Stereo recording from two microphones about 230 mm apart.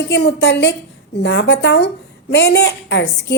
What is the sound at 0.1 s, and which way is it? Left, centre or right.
A woman's voice, left.